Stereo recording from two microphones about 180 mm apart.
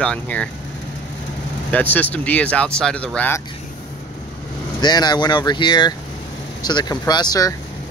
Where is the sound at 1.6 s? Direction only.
10° left (ahead or behind).